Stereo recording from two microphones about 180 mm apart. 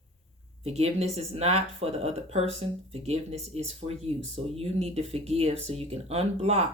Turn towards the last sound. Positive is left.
turn(degrees=-35)  # may be behind; listen again after turning